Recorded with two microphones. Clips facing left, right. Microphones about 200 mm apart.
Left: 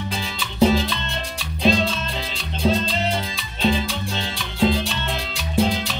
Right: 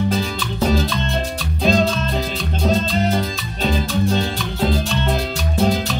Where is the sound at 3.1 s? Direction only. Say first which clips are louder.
Right 5 dB; 45° right (ahead or behind).